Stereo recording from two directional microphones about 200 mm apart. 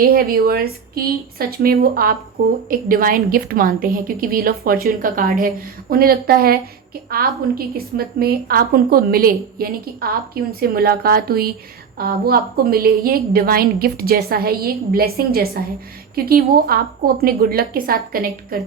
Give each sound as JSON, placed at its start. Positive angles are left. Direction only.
{"t": 0.0, "sound": "a woman's voice", "side_deg": -50}
{"t": 7.9, "sound": "a woman's voice", "side_deg": -50}